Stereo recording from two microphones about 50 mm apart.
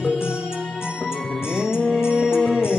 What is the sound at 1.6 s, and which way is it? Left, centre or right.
Music, centre.